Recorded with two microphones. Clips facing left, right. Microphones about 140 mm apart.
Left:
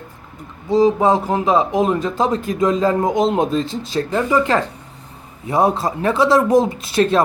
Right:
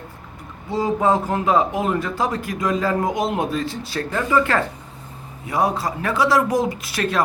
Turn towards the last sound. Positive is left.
turn(degrees=25)  # may be behind; listen again after turning